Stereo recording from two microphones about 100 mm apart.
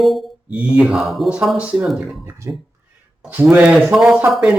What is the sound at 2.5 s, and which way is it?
Speech, 25° right (ahead or behind).